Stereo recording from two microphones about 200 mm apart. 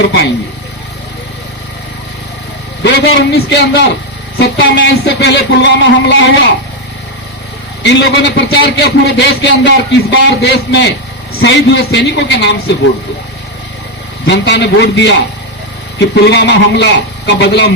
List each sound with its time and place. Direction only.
2.8 s a man's voice: 60° left (ahead or behind)
7.8 s a man's voice: 60° left (ahead or behind)
14.3 s a man's voice: 60° left (ahead or behind)